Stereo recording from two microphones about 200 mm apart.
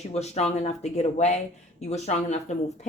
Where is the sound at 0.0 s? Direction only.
30° left (ahead or behind).